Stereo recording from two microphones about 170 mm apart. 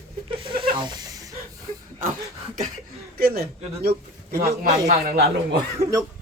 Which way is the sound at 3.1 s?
65° right (ahead or behind).